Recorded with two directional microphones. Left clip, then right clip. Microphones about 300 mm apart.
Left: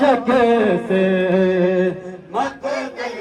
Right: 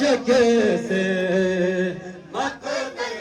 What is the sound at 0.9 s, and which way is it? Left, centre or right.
Music, centre.